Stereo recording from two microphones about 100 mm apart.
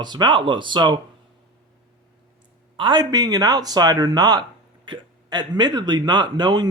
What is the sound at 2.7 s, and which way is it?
Speech, 50° right (ahead or behind).